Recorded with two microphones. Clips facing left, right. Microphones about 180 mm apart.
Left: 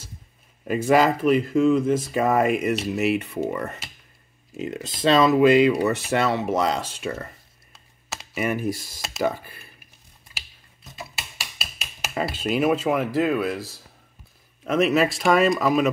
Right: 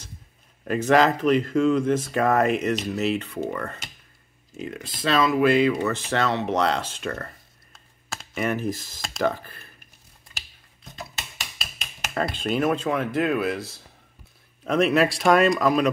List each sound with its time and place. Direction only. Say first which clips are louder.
0.7 s speech: even; 10° left (ahead or behind)
10.3 s a sound: left 1 dB; 5° left (ahead or behind)
14.6 s a man's voice: even; centre (ahead or behind)